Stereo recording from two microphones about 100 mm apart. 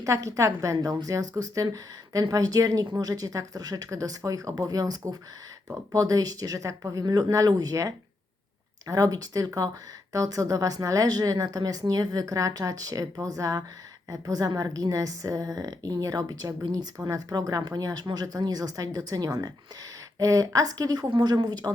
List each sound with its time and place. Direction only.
0.0 s a woman's voice: 35° right (ahead or behind)